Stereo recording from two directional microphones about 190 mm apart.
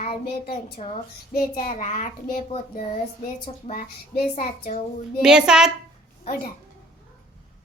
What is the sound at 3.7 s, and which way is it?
Speech, 45° left (ahead or behind).